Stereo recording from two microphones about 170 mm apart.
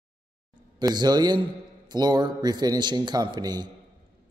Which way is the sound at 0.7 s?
25° right (ahead or behind).